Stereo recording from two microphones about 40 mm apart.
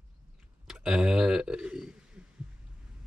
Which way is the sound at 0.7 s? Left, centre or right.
Centre.